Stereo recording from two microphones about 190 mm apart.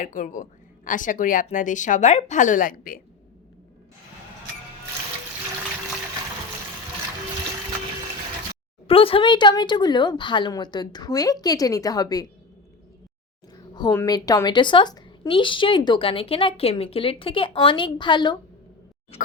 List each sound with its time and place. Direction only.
0.0 s a woman's voice: 45° left (ahead or behind)
8.9 s speech: 30° left (ahead or behind)
13.7 s speech: 20° left (ahead or behind)